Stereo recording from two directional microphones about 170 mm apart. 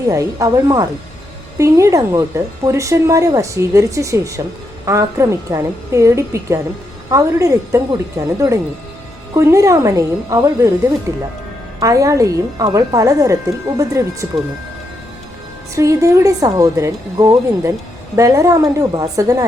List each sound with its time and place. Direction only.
0.1 s a woman's voice: 20° right (ahead or behind)
15.7 s speech: 20° right (ahead or behind)